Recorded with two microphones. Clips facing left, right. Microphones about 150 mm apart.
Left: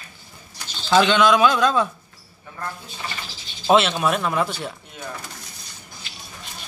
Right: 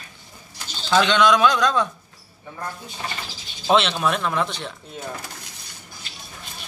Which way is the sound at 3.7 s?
5° left (ahead or behind).